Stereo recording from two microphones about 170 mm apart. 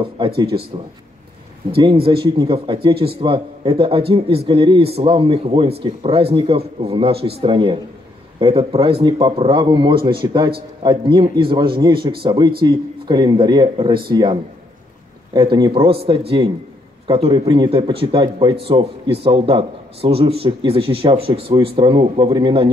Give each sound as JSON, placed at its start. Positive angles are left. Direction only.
{"t": 0.2, "sound": "speech", "side_deg": -30}
{"t": 1.7, "sound": "speech", "side_deg": -35}